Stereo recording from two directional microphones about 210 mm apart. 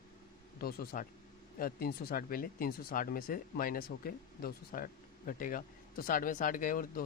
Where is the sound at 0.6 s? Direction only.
45° left (ahead or behind).